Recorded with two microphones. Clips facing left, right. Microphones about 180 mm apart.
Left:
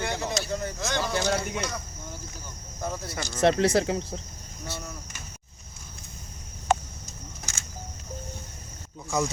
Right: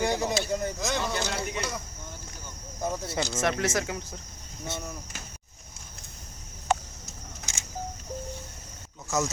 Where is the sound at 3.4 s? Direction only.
30° left (ahead or behind).